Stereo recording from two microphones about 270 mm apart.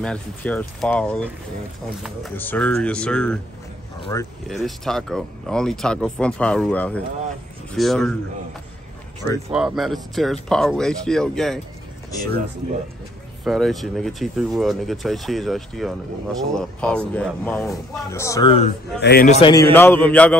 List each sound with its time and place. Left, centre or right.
0.0 s speech: centre
9.5 s speech: centre
13.4 s speech: centre
18.9 s a man's voice: left
19.3 s a man's voice: centre
19.7 s speech: centre